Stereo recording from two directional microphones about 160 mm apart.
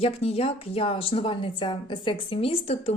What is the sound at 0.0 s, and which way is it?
Speech, 40° left (ahead or behind).